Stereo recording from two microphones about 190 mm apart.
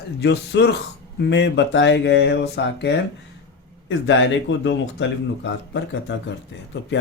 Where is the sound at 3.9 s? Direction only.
80° left.